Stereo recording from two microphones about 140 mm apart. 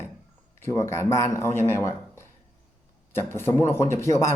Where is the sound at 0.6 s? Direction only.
20° left (ahead or behind).